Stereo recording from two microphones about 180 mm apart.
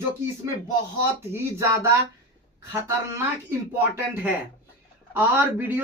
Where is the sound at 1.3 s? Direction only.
15° right (ahead or behind).